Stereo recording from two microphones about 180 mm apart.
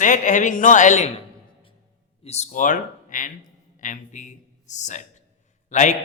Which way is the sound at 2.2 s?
40° left (ahead or behind).